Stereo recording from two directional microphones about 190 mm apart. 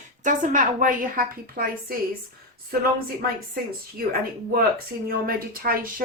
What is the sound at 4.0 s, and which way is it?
Speech, 50° right (ahead or behind).